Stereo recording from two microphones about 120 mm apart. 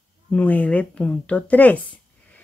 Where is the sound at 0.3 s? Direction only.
15° left (ahead or behind).